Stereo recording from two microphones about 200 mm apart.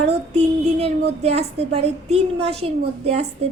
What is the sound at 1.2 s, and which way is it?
A woman's voice, 30° right (ahead or behind).